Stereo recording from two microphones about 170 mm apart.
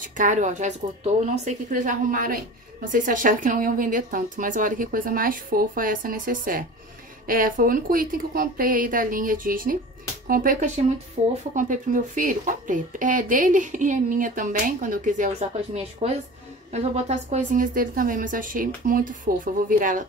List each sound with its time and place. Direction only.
0.0 s speech: 50° right (ahead or behind)
11.2 s speech: 40° right (ahead or behind)